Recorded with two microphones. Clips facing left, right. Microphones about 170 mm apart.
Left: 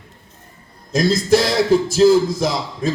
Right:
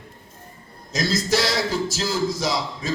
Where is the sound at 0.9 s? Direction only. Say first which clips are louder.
Left 7 dB; 55° left (ahead or behind).